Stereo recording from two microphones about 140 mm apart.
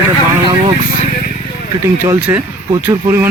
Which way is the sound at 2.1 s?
15° right (ahead or behind).